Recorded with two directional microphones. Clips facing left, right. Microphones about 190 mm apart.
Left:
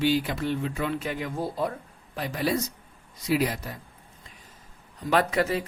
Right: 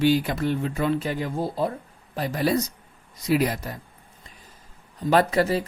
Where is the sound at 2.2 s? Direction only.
45° right (ahead or behind).